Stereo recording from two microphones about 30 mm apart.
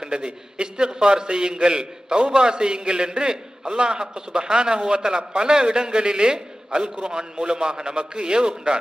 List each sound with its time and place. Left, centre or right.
0.0 s a man's voice: right